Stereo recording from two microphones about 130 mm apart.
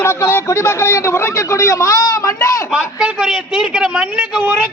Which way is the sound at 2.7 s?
10° right (ahead or behind).